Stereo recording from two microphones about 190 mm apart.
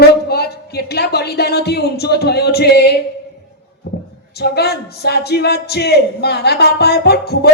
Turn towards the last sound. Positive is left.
turn(degrees=55)  # may be behind; listen again after turning